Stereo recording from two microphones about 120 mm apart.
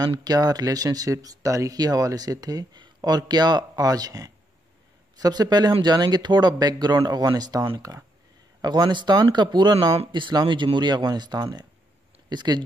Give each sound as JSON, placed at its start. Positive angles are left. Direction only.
{"t": 0.0, "sound": "speech", "side_deg": -35}